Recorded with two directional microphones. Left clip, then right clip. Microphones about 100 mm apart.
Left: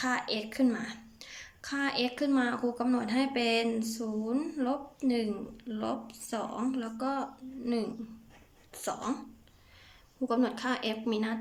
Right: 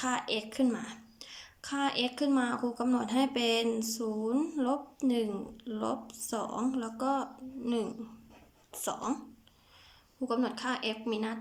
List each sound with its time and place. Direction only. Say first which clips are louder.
0.0 s a woman's voice: left 1 dB; 15° right (ahead or behind)
10.2 s a woman's voice: left 2 dB; 5° right (ahead or behind)